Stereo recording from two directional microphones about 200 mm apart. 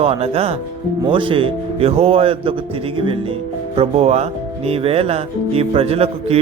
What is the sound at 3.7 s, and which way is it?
Speech, 30° right (ahead or behind).